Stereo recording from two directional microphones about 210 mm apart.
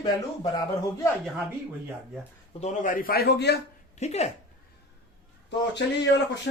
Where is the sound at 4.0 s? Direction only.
30° left (ahead or behind).